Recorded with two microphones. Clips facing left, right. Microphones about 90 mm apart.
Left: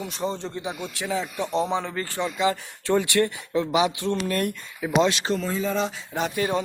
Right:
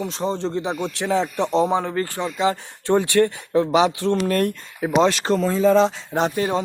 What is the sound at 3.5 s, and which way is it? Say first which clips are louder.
Speech: right 5 dB; 35° right (ahead or behind).